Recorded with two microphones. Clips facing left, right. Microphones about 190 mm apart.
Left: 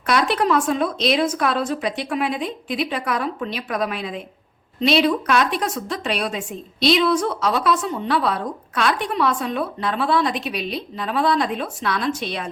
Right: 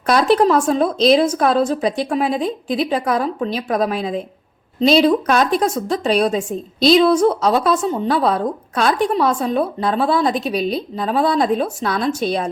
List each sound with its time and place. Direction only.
0.1 s a woman's voice: 35° right (ahead or behind)